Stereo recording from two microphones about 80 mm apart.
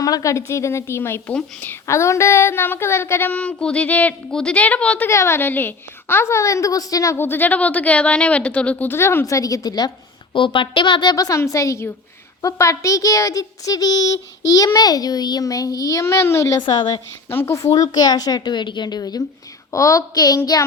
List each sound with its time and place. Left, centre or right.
0.0 s a woman's voice: left
1.3 s a woman's voice: centre
1.7 s speech: left; by 5.0 s centre
5.0 s a woman's voice: left
7.3 s a woman's voice: left
9.0 s a woman's voice: left
9.2 s a child's voice: left
10.3 s speech: left
11.3 s a woman's voice: left
16.6 s a woman's voice: left
17.2 s a woman's voice: left
19.7 s a child's voice: left